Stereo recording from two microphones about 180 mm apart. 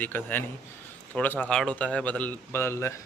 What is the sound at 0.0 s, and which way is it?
Speech, 10° left (ahead or behind).